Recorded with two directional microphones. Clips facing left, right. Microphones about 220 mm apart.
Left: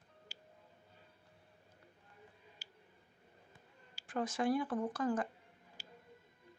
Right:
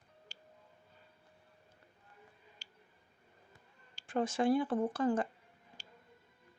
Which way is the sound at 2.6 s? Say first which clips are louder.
Left 1 dB; 10° left (ahead or behind).